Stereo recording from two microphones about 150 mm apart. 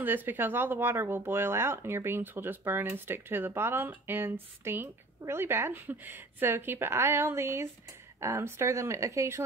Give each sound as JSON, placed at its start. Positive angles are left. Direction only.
{"t": 0.0, "sound": "speech", "side_deg": -10}